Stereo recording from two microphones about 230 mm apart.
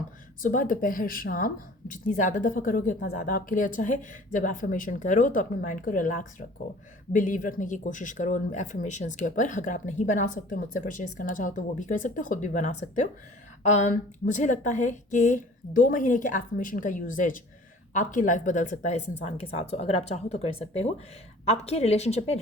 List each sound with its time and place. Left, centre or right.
0.4 s a woman's voice: left